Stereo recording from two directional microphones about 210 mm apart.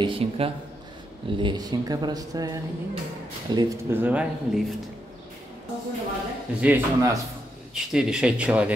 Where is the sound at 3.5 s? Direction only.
15° right (ahead or behind).